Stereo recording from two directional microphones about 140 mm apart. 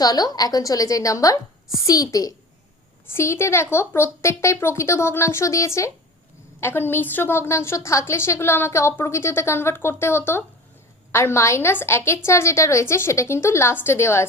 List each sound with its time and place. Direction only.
0.0 s a woman's voice: 25° left (ahead or behind)